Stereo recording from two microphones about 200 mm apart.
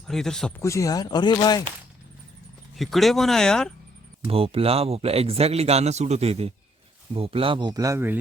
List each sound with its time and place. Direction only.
0.1 s speech: centre (ahead or behind)
0.6 s speech: 15° left (ahead or behind)
2.7 s speech: centre (ahead or behind)
4.3 s a man's voice: 30° right (ahead or behind); by 8.2 s 10° right (ahead or behind)